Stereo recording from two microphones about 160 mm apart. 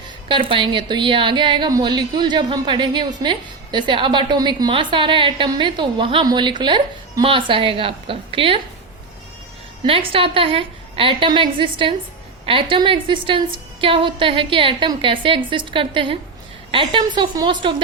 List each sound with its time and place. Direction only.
0.3 s a woman's voice: 30° right (ahead or behind)
9.8 s a woman's voice: 35° right (ahead or behind)